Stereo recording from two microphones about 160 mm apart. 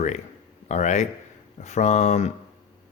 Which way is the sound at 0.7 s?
45° left (ahead or behind).